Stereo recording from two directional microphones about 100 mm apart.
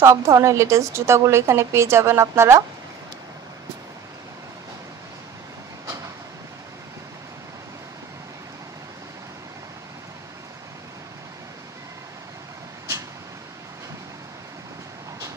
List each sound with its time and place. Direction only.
0.0 s a woman's voice: 30° right (ahead or behind)